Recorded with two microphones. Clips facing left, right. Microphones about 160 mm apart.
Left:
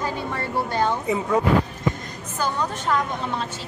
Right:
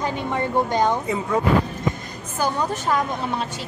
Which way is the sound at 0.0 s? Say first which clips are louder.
Right 3 dB; 15° right (ahead or behind).